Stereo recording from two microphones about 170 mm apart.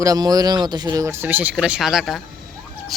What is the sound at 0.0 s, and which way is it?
Speech, 20° right (ahead or behind).